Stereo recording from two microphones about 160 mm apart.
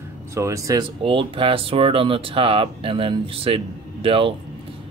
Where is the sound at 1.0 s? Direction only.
35° right (ahead or behind).